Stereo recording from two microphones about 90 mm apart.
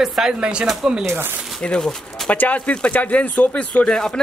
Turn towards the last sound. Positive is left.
turn(degrees=10)  # may be behind; listen again after turning